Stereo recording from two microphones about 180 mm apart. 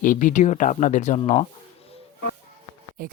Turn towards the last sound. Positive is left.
turn(degrees=-50)  # may be behind; listen again after turning